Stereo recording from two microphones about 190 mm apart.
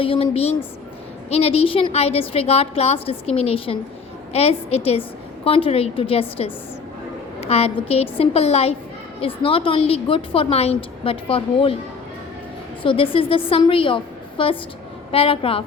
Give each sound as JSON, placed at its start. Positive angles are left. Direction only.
{"t": 0.0, "sound": "a woman's voice", "side_deg": 30}
{"t": 12.8, "sound": "a woman's voice", "side_deg": 30}